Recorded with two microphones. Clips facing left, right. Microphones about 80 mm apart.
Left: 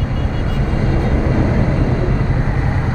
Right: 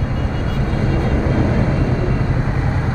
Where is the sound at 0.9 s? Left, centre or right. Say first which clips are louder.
Left 1 dB; centre.